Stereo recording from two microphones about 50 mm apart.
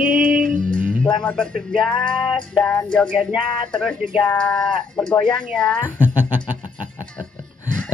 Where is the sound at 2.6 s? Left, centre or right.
Centre.